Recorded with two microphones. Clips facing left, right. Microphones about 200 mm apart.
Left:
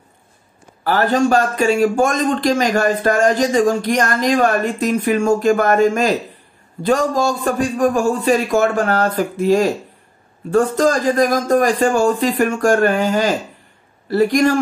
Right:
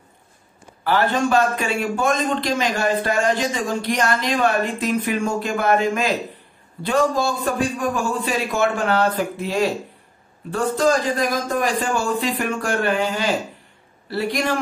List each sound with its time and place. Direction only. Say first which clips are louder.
0.8 s a man's voice: left 4 dB; 40° left (ahead or behind)